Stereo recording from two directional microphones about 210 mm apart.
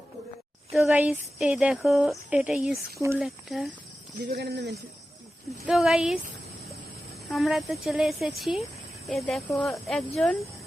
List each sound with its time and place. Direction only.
0.7 s speech: centre (ahead or behind)
3.2 s speech: centre (ahead or behind)
4.3 s speech: 50° right (ahead or behind)
5.6 s speech: centre (ahead or behind)
7.3 s speech: centre (ahead or behind)